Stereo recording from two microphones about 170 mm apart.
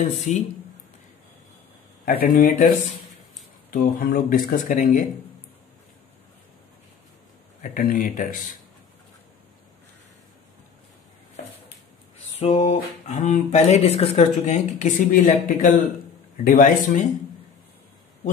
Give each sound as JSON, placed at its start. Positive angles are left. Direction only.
{"t": 0.3, "sound": "speech", "side_deg": 45}
{"t": 2.0, "sound": "speech", "side_deg": 55}
{"t": 3.7, "sound": "speech", "side_deg": 60}
{"t": 7.6, "sound": "speech", "side_deg": 50}
{"t": 12.4, "sound": "speech", "side_deg": 40}